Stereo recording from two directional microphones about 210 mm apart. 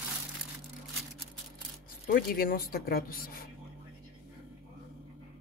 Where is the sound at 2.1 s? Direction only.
45° left (ahead or behind).